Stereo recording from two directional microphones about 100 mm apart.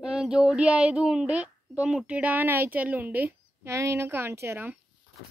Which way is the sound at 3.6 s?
30° right (ahead or behind).